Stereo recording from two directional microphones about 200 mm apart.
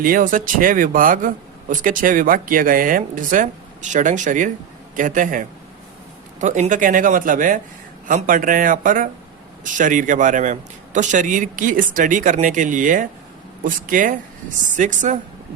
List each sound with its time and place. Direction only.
0.0 s a man's voice: 45° right (ahead or behind)